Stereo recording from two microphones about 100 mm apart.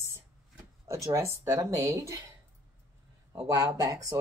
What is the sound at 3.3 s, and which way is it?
Speech, 35° right (ahead or behind).